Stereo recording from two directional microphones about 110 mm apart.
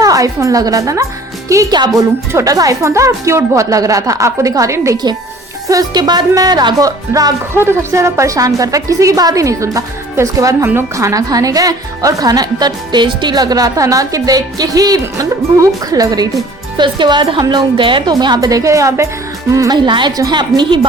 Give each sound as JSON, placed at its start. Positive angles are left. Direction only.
{"t": 0.0, "sound": "a woman's voice", "side_deg": -30}
{"t": 7.5, "sound": "a woman's voice", "side_deg": -20}
{"t": 18.1, "sound": "a woman's voice", "side_deg": -40}